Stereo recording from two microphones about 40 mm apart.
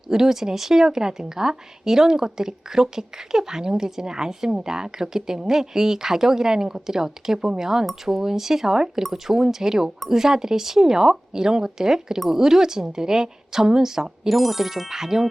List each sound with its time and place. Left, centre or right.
0.1 s speech: centre